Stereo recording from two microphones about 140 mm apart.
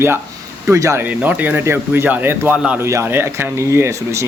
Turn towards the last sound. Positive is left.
turn(degrees=-20)  # may be behind; listen again after turning